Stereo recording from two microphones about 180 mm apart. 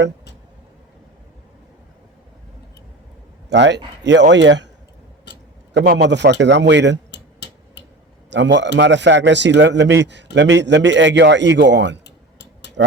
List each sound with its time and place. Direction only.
3.5 s a man's voice: 80° right
5.7 s a man's voice: 65° right (ahead or behind)
7.1 s tick-tock: 75° left (ahead or behind)
8.3 s a man's voice: 80° right
12.0 s tick-tock: 75° left (ahead or behind)